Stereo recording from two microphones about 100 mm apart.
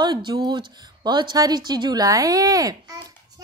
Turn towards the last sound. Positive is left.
turn(degrees=-40)  # may be behind; listen again after turning